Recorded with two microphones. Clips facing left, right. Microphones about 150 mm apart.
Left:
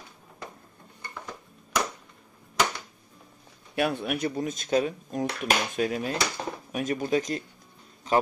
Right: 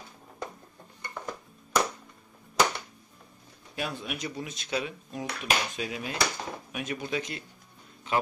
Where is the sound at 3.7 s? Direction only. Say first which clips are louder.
Left 8 dB; 60° left (ahead or behind).